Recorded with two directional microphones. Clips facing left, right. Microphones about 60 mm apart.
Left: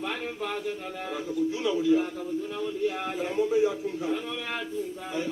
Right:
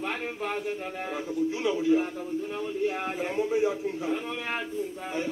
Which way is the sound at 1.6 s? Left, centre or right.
Right.